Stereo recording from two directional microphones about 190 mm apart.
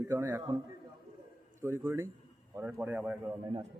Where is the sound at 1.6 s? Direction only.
15° right (ahead or behind).